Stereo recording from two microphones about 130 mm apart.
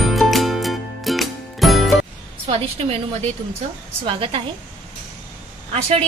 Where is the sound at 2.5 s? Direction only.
45° right (ahead or behind).